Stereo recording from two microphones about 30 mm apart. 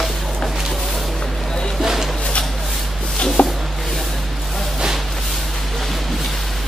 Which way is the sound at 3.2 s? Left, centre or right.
Left.